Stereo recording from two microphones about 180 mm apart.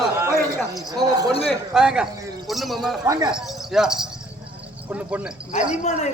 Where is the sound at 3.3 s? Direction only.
5° right (ahead or behind).